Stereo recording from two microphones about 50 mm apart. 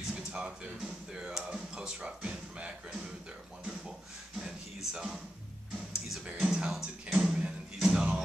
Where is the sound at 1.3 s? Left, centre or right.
Centre.